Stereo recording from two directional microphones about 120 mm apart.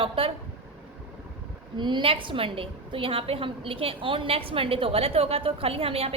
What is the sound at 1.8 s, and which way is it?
A woman's voice, 40° right (ahead or behind).